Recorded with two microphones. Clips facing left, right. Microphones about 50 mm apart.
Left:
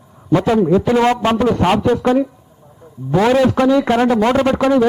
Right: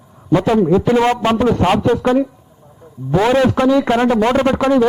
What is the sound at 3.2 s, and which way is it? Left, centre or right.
Speech, right.